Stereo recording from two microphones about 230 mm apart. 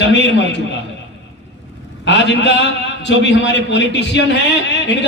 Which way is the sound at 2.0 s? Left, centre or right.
Left.